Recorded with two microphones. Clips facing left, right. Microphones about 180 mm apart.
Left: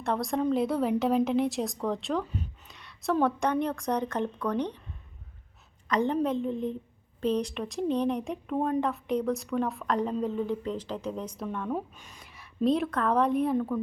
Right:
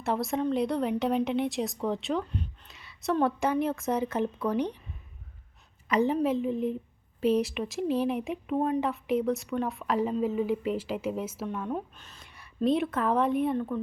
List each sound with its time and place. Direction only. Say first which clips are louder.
0.0 s speech: even; 5° right (ahead or behind)
5.9 s speech: right 1 dB; 5° right (ahead or behind)
11.9 s speech: left 2 dB; 10° left (ahead or behind)
12.2 s a woman's voice: left 1 dB; centre (ahead or behind)